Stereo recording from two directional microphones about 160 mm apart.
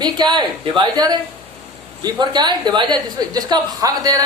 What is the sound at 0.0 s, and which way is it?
A woman's voice, 25° right (ahead or behind).